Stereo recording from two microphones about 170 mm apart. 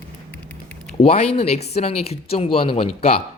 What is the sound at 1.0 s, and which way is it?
Speech, 40° left (ahead or behind).